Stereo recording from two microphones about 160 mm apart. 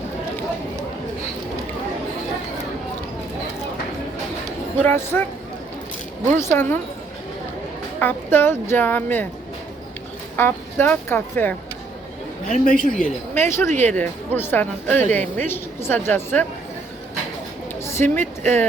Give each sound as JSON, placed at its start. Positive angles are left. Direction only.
{"t": 4.8, "sound": "a woman's voice", "side_deg": 15}
{"t": 6.3, "sound": "a woman's voice", "side_deg": 15}
{"t": 7.9, "sound": "a woman's voice", "side_deg": 15}
{"t": 10.3, "sound": "a woman's voice", "side_deg": 15}
{"t": 12.5, "sound": "a woman's voice", "side_deg": 55}
{"t": 13.3, "sound": "a woman's voice", "side_deg": 15}
{"t": 17.8, "sound": "speech", "side_deg": 15}